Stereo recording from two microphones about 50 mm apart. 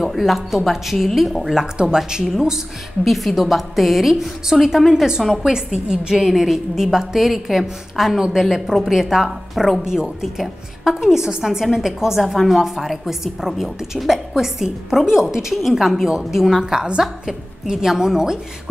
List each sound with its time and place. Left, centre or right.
0.0 s a woman's voice: centre
1.6 s a woman's voice: centre
3.1 s a woman's voice: centre